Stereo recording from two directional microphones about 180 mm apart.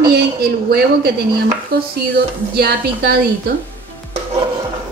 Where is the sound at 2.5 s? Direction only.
60° right (ahead or behind).